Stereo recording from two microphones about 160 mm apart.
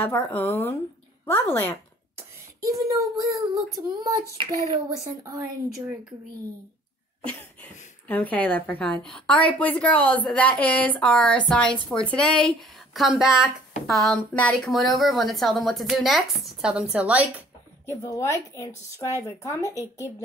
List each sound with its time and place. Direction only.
0.0 s speech: 15° left (ahead or behind)
2.1 s speech: 20° right (ahead or behind)
3.5 s child singing: 20° right (ahead or behind)
8.1 s a woman's voice: 10° left (ahead or behind); by 17.3 s 10° right (ahead or behind)
17.8 s a woman's voice: 20° left (ahead or behind)